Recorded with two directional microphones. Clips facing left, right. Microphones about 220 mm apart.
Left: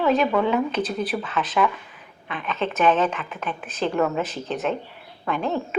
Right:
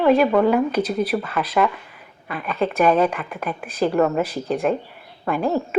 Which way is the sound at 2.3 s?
5° right (ahead or behind).